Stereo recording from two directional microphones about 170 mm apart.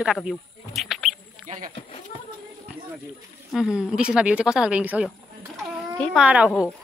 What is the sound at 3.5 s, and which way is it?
Speech, 5° right (ahead or behind).